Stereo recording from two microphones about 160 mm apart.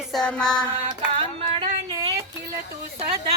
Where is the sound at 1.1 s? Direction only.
35° right (ahead or behind).